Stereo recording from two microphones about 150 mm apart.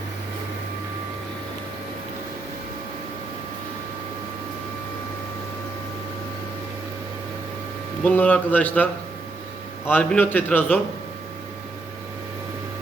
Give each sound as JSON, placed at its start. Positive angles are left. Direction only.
{"t": 8.0, "sound": "a man's voice", "side_deg": 10}